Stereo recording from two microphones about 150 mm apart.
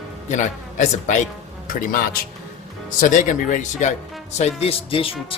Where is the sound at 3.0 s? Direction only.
60° left (ahead or behind).